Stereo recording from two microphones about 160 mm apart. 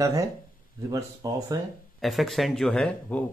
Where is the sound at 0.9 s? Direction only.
20° right (ahead or behind).